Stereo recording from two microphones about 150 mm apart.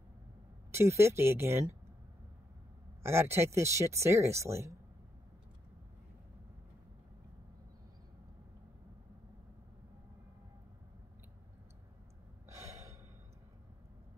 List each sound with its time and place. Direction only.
0.7 s speech: 15° right (ahead or behind)
3.0 s speech: 15° right (ahead or behind)
12.4 s gasp: 20° right (ahead or behind)